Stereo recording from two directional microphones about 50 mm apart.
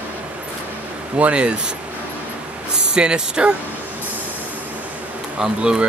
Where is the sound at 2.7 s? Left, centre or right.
Centre.